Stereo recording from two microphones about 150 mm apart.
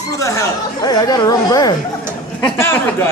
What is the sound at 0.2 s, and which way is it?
Speech, 20° left (ahead or behind).